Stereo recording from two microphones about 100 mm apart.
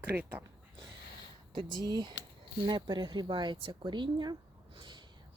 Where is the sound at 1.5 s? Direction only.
40° right (ahead or behind).